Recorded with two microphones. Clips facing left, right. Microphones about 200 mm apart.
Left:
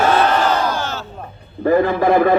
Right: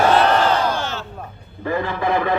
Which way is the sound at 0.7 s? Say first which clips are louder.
Left 2 dB; 40° left (ahead or behind).